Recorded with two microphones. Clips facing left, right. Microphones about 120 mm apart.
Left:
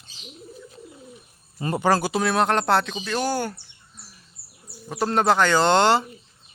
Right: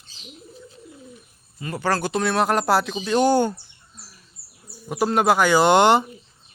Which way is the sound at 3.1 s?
20° right (ahead or behind).